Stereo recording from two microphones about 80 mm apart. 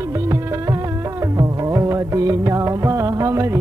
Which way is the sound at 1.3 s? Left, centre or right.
Right.